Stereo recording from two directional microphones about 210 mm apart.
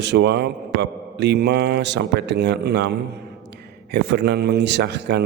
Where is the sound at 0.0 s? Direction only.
55° right (ahead or behind).